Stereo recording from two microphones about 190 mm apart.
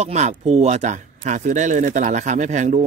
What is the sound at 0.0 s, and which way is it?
Speech, 35° right (ahead or behind).